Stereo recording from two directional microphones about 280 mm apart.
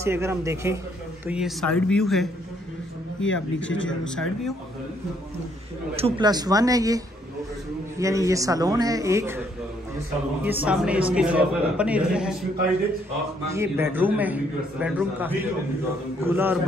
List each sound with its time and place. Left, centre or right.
0.0 s a man's voice: centre
3.2 s speech: left
4.0 s a man's voice: centre
5.9 s a man's voice: centre
8.0 s a man's voice: centre
10.4 s a man's voice: centre
13.5 s a man's voice: centre